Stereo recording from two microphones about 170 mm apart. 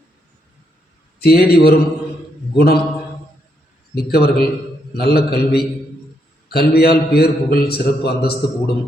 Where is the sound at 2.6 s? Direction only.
65° left (ahead or behind).